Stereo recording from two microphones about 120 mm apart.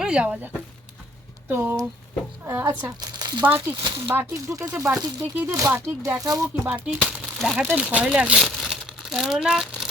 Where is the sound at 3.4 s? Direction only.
15° right (ahead or behind); by 6.5 s 30° right (ahead or behind).